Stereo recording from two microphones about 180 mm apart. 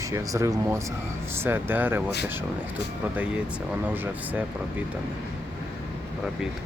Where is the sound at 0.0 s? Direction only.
15° right (ahead or behind).